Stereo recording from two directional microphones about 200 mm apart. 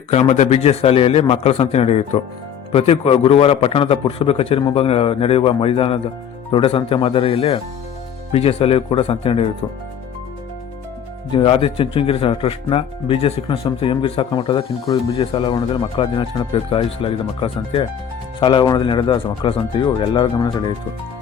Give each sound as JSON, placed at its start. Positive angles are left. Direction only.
{"t": 0.1, "sound": "a man's voice", "side_deg": 35}
{"t": 11.3, "sound": "speech", "side_deg": 30}